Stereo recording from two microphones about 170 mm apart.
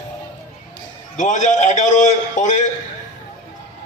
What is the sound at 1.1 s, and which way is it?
A man's voice, 45° left (ahead or behind).